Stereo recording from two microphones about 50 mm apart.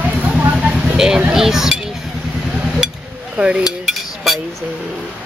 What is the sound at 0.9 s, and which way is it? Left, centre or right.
Speech, centre.